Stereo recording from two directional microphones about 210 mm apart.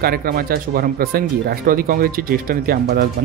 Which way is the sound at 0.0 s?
45° right (ahead or behind).